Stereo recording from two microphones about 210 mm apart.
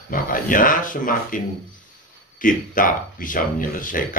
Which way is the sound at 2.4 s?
40° left (ahead or behind).